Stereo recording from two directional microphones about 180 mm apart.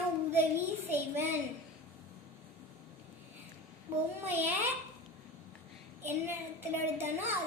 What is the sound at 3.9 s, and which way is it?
Speech, 15° right (ahead or behind).